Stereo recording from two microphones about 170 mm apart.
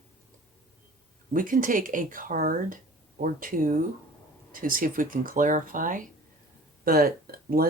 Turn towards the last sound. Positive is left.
turn(degrees=-60)  # may be behind; listen again after turning